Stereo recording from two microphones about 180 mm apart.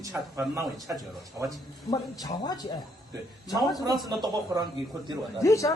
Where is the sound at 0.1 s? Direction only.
10° right (ahead or behind).